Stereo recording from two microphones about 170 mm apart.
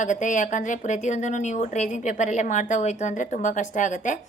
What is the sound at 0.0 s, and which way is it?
A woman's voice, 45° left (ahead or behind).